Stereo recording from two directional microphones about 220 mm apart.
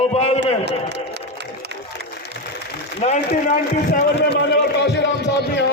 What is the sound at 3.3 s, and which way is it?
A man's voice, 45° left (ahead or behind).